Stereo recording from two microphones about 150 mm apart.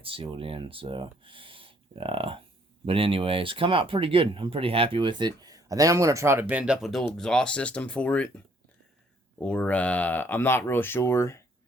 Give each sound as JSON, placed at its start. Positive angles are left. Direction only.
{"t": 0.0, "sound": "speech", "side_deg": -35}
{"t": 9.4, "sound": "speech", "side_deg": 10}